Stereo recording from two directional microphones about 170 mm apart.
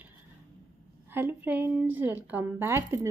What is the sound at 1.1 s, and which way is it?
Speech, 10° right (ahead or behind).